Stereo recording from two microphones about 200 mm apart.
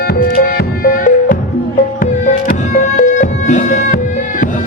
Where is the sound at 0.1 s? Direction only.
45° left (ahead or behind).